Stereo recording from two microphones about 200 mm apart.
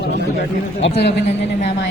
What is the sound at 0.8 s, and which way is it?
A man's voice, 60° left (ahead or behind).